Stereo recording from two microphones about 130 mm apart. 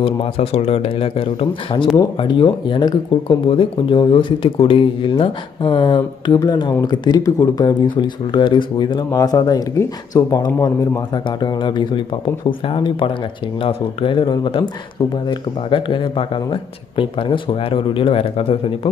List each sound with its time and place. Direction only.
0.0 s speech: 45° left (ahead or behind)